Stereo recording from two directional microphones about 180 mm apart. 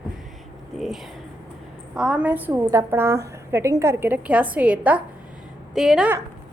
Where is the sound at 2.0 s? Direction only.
5° right (ahead or behind).